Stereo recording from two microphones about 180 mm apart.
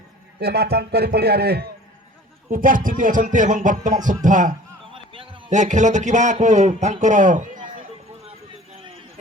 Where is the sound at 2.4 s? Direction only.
50° right (ahead or behind).